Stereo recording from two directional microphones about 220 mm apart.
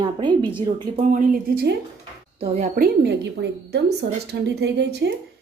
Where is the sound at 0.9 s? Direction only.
35° right (ahead or behind); by 5.1 s 50° right (ahead or behind).